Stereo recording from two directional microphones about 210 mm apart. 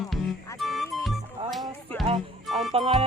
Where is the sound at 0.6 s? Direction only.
Centre (ahead or behind).